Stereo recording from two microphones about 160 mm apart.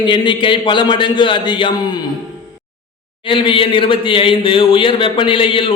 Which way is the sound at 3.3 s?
30° left (ahead or behind).